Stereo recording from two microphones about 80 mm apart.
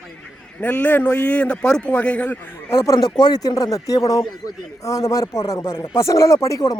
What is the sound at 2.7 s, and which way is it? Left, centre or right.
Speech, left.